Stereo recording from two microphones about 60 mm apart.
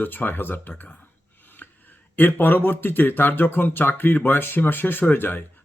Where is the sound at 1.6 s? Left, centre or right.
Left.